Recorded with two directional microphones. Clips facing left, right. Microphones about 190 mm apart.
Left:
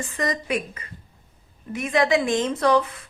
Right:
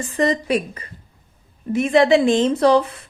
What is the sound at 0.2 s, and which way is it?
A woman's voice, 30° right (ahead or behind).